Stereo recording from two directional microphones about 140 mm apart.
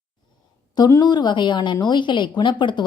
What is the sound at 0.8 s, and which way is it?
A woman's voice, 25° left (ahead or behind).